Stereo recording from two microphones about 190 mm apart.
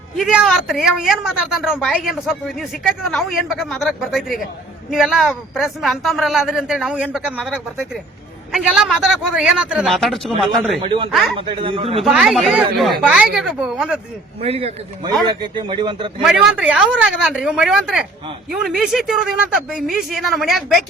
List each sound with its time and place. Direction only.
0.3 s a woman's voice: 5° right (ahead or behind)
10.8 s speech: 25° right (ahead or behind)
11.1 s a woman's voice: centre (ahead or behind)
11.3 s speech: 30° right (ahead or behind)
12.0 s a woman's voice: centre (ahead or behind)
14.4 s a man's voice: 30° right (ahead or behind)
16.2 s a woman's voice: 5° right (ahead or behind)